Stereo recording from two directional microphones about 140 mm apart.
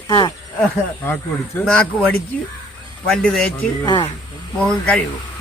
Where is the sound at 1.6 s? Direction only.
5° left (ahead or behind).